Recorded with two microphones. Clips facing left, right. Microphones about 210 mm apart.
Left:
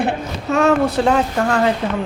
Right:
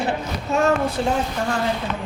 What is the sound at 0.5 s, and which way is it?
Speech, 85° left.